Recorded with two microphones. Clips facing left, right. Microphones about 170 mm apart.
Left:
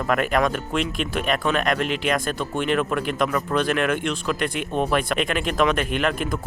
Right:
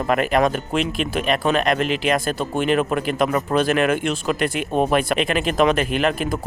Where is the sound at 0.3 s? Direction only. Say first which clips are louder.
Right 3 dB; 30° right (ahead or behind).